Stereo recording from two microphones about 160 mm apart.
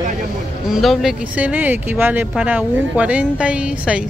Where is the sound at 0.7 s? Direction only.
Centre (ahead or behind).